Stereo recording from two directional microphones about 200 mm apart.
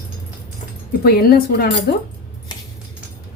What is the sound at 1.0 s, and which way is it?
Speech, 50° left (ahead or behind).